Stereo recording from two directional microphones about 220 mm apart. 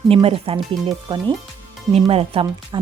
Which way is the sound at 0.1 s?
25° right (ahead or behind).